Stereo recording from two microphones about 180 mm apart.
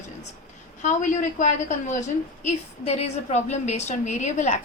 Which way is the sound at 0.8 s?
40° left (ahead or behind).